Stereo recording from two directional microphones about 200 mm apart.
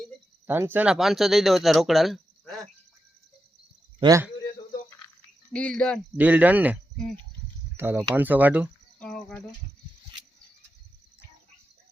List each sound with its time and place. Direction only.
0.4 s speech: 10° right (ahead or behind)
4.0 s speech: 15° right (ahead or behind)
5.5 s speech: 5° left (ahead or behind)
6.1 s speech: 10° right (ahead or behind)
7.8 s speech: 10° right (ahead or behind)
9.0 s speech: 5° left (ahead or behind)